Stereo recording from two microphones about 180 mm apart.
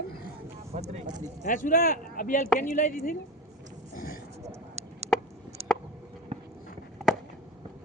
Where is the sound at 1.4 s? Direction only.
50° left (ahead or behind).